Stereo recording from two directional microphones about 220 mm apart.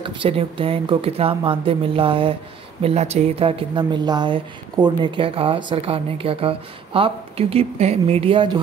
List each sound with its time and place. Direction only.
0.0 s a woman's voice: 25° right (ahead or behind)